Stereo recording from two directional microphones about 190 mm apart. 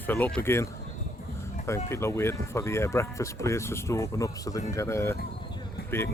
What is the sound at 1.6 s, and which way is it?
Speech, 15° left (ahead or behind).